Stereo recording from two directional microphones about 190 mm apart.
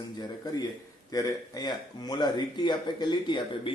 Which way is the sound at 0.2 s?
20° left (ahead or behind).